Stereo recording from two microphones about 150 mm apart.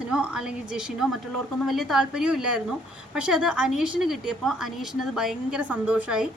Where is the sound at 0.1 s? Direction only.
5° right (ahead or behind).